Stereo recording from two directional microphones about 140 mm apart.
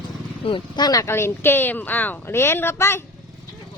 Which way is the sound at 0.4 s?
35° left (ahead or behind).